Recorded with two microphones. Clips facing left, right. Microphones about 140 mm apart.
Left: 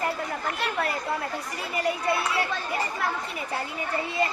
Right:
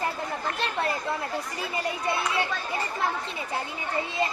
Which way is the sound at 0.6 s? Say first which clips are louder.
Even; 25° right (ahead or behind).